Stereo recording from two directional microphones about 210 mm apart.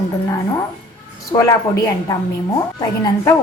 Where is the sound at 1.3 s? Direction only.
15° left (ahead or behind).